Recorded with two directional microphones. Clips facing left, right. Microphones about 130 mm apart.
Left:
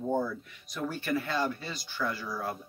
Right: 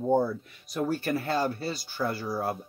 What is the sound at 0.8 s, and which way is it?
Speech, 40° right (ahead or behind).